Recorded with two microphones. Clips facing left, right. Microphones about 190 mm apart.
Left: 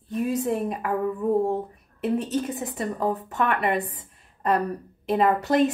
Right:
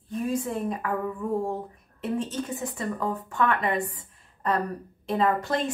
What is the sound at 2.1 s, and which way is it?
Speech, 65° left (ahead or behind).